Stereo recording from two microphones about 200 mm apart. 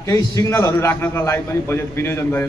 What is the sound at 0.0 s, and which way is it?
A man's voice, 15° left (ahead or behind).